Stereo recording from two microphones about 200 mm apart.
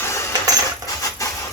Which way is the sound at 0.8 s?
15° left (ahead or behind).